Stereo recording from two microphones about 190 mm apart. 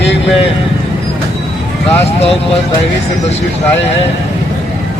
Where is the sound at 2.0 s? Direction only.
35° left (ahead or behind).